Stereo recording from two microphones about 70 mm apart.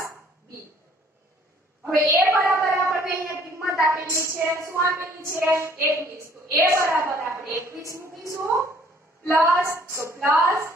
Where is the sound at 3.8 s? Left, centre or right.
Right.